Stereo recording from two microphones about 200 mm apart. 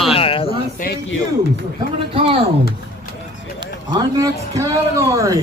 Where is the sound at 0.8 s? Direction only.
40° left (ahead or behind).